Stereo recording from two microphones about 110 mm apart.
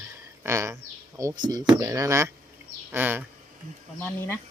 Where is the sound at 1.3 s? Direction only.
40° right (ahead or behind); by 3.2 s 20° right (ahead or behind).